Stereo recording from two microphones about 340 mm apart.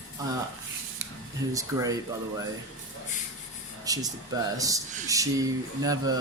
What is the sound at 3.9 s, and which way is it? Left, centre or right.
Speech, centre.